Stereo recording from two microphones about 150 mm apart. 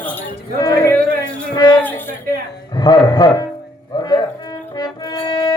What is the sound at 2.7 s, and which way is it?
Speech, 25° left (ahead or behind).